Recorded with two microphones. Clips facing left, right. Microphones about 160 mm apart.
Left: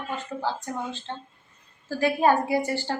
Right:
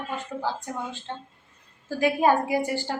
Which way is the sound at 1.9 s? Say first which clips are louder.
Even; 15° right (ahead or behind).